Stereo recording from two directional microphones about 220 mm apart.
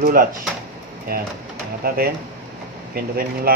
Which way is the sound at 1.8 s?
45° right (ahead or behind).